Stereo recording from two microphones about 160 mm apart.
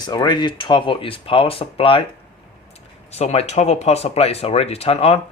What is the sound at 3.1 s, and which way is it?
Speech, 40° left (ahead or behind).